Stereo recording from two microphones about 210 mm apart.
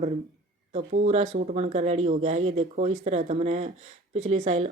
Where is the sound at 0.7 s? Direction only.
30° right (ahead or behind).